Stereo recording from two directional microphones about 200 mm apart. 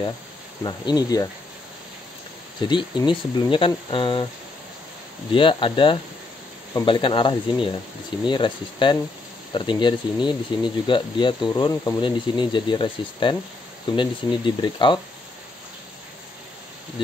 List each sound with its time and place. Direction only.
0.7 s speech: 20° left (ahead or behind)
2.7 s speech: 25° left (ahead or behind)
5.3 s speech: 25° left (ahead or behind)